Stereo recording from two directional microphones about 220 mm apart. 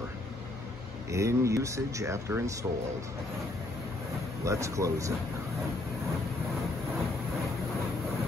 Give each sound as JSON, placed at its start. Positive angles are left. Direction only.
{"t": 1.1, "sound": "speech", "side_deg": -15}
{"t": 4.5, "sound": "speech", "side_deg": -15}